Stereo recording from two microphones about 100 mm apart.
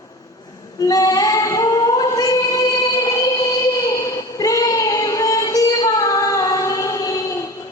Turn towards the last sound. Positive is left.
turn(degrees=35)  # may be behind; listen again after turning